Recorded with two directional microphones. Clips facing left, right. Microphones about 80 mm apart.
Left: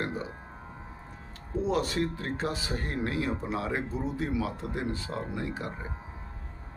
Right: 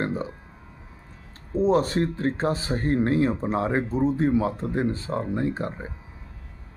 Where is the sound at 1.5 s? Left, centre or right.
Right.